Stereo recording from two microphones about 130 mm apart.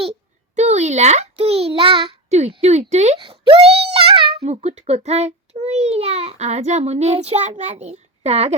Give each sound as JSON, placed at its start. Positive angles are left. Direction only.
{"t": 0.0, "sound": "a sound", "side_deg": -55}
{"t": 2.5, "sound": "a child's voice", "side_deg": -55}
{"t": 3.2, "sound": "a child's voice", "side_deg": -40}